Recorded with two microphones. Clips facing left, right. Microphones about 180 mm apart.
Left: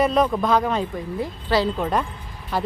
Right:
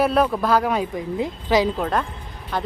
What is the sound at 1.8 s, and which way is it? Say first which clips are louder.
Speech: even; 5° left (ahead or behind).